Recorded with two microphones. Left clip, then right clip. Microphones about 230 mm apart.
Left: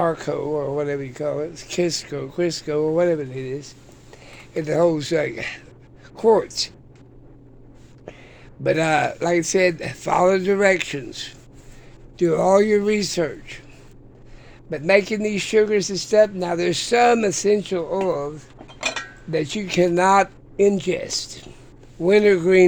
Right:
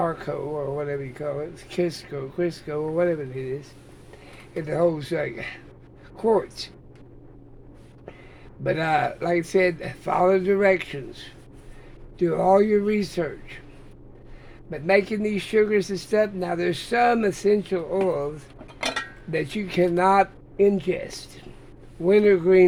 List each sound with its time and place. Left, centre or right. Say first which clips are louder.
0.0 s speech: left 4 dB; left
8.6 s speech: left 4 dB; left
14.7 s speech: left 3 dB; left
18.0 s speech: even; left
19.3 s speech: left 4 dB; left